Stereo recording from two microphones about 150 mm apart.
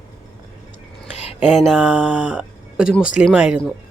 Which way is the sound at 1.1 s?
50° left (ahead or behind).